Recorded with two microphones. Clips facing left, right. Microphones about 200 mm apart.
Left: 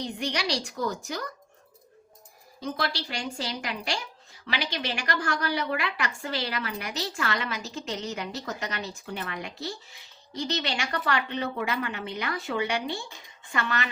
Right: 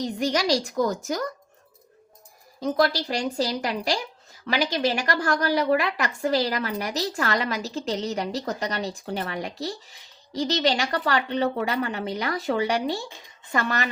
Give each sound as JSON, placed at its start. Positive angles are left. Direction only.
{"t": 0.0, "sound": "a woman's voice", "side_deg": -40}
{"t": 2.6, "sound": "a woman's voice", "side_deg": -40}